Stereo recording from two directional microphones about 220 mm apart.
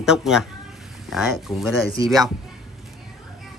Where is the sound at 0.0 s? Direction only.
Centre (ahead or behind).